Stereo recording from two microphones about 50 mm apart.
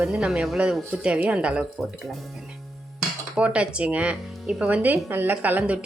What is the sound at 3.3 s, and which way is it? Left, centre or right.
Speech, right.